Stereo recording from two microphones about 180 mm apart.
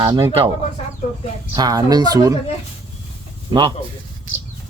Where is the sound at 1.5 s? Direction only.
20° right (ahead or behind).